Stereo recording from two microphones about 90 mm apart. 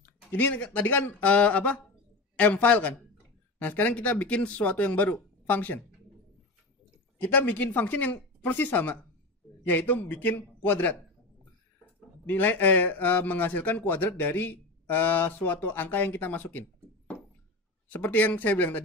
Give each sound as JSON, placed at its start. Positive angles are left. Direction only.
{"t": 0.0, "sound": "speech", "side_deg": 20}
{"t": 7.2, "sound": "speech", "side_deg": 20}
{"t": 17.9, "sound": "speech", "side_deg": 20}